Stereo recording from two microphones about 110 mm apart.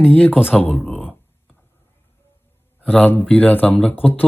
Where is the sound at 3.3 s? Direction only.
15° left (ahead or behind).